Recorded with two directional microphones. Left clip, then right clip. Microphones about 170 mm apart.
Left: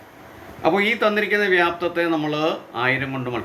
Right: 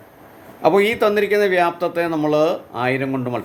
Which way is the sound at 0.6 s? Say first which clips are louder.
Right 3 dB; 70° right (ahead or behind).